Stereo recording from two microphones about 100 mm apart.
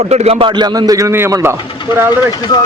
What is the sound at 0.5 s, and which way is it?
Speech, 40° right (ahead or behind).